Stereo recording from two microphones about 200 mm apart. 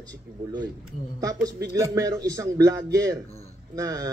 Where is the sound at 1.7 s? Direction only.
15° right (ahead or behind).